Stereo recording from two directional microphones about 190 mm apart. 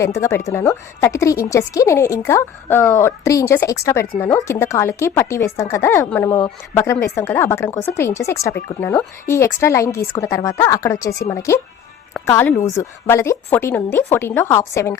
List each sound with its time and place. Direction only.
0.0 s a woman's voice: 15° left (ahead or behind)